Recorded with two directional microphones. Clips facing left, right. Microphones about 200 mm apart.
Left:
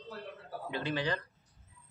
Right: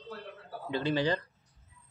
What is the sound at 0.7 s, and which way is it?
Speech, 30° right (ahead or behind).